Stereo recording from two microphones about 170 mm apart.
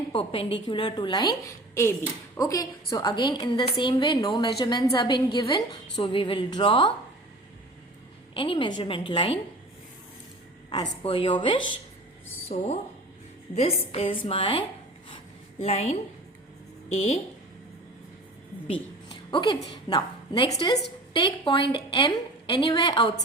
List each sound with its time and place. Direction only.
0.1 s a woman's voice: 35° left (ahead or behind)
8.3 s a woman's voice: 30° left (ahead or behind)
10.7 s a woman's voice: 30° left (ahead or behind)
12.5 s a woman's voice: 40° left (ahead or behind)
15.6 s a woman's voice: 40° left (ahead or behind)
19.3 s a woman's voice: 25° left (ahead or behind)